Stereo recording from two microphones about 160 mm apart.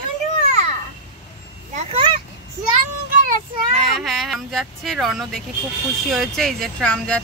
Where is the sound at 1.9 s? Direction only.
35° right (ahead or behind).